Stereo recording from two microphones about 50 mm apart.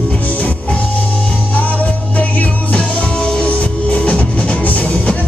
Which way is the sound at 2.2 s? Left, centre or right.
Left.